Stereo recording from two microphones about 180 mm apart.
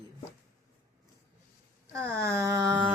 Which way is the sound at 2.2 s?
15° right (ahead or behind).